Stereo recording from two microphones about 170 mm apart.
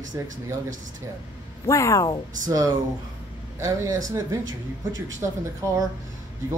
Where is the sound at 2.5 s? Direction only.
20° right (ahead or behind).